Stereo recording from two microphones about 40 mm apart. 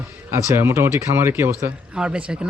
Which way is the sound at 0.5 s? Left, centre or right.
Right.